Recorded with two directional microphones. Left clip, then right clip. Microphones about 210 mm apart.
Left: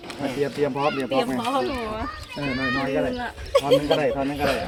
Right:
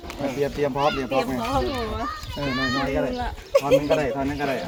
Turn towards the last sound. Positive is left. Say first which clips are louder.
# even
turn(degrees=35)  # may be behind; listen again after turning